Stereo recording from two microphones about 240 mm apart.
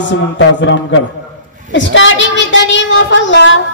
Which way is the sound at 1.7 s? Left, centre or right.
Left.